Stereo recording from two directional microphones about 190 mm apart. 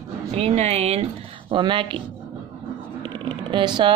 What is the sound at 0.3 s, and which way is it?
Speech, 35° right (ahead or behind).